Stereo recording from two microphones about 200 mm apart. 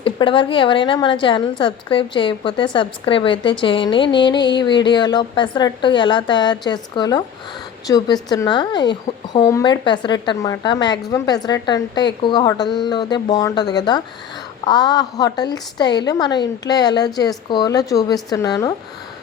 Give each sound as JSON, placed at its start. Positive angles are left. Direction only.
{"t": 0.0, "sound": "speech", "side_deg": 25}